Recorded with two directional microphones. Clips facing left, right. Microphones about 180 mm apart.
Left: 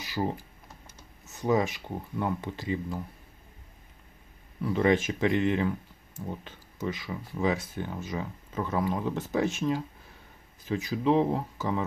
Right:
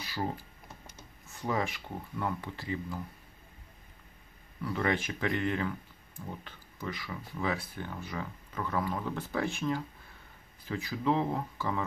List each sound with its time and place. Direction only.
0.0 s computer keyboard: 15° left (ahead or behind)
1.4 s speech: 20° left (ahead or behind)
4.6 s speech: 20° left (ahead or behind)